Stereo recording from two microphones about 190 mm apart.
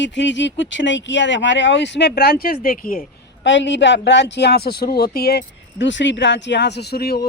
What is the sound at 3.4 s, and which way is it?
Speech, 75° left (ahead or behind).